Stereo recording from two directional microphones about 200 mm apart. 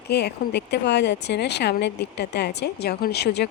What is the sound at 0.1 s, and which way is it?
Speech, 55° left (ahead or behind).